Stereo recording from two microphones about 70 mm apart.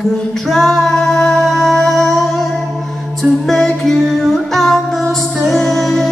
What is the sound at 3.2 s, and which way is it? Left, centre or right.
Music, centre.